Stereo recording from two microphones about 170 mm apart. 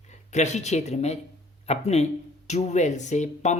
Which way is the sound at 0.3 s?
40° left (ahead or behind).